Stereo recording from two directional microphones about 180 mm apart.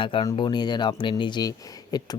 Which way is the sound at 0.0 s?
30° left (ahead or behind).